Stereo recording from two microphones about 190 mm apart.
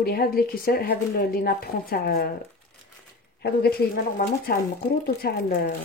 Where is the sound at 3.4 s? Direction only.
55° left (ahead or behind).